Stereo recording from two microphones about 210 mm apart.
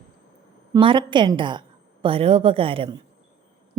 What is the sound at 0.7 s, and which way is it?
A woman's voice, 25° right (ahead or behind).